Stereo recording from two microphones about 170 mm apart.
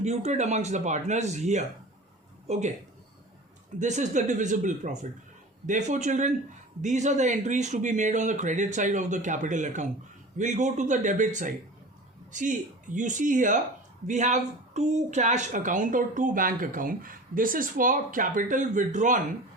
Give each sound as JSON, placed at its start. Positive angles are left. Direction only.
{"t": 0.0, "sound": "speech", "side_deg": -40}
{"t": 3.8, "sound": "speech", "side_deg": -45}